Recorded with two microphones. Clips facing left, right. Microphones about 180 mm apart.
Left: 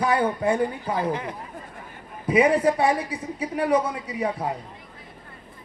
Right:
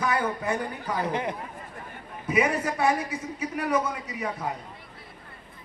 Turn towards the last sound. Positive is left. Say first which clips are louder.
# left 5 dB
turn(degrees=30)  # may be behind; listen again after turning